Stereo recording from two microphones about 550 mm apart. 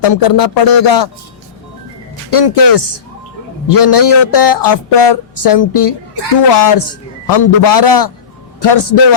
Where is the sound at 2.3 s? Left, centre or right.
Left.